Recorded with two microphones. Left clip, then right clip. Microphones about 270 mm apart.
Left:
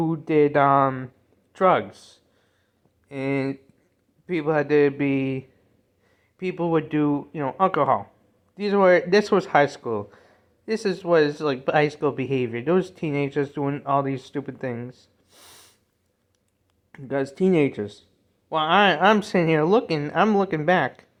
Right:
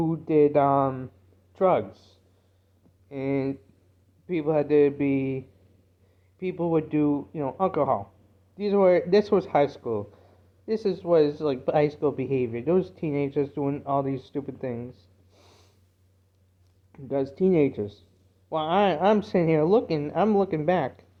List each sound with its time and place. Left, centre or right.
0.0 s speech: left
6.4 s speech: left
16.9 s speech: left